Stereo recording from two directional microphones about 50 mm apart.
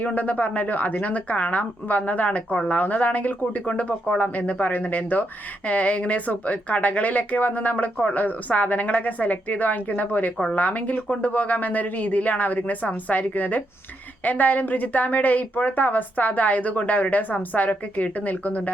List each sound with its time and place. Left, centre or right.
0.0 s speech: left